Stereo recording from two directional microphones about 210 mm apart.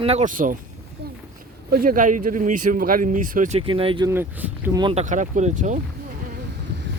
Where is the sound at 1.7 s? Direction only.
45° right (ahead or behind); by 4.0 s 25° right (ahead or behind).